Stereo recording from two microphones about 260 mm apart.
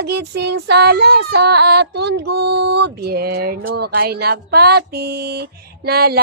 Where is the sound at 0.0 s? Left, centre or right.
Right.